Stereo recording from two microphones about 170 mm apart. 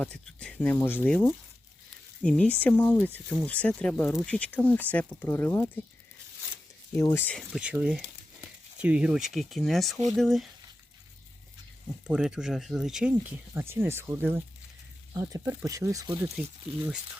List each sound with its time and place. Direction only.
0.0 s speech: 5° left (ahead or behind)
6.9 s speech: 15° left (ahead or behind)
7.5 s speech: 5° right (ahead or behind)
12.0 s speech: 5° right (ahead or behind); by 16.3 s 20° right (ahead or behind)